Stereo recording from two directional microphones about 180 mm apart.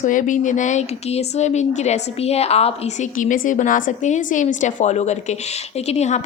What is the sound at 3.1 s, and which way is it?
A woman's voice, 50° left (ahead or behind).